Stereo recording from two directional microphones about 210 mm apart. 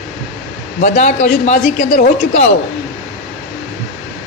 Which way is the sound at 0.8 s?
35° left (ahead or behind).